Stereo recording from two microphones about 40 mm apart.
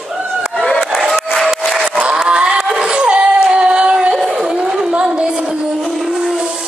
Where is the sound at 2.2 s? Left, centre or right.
Right.